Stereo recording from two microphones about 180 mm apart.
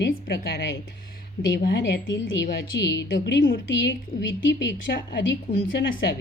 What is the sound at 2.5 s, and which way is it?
Speech, 80° left.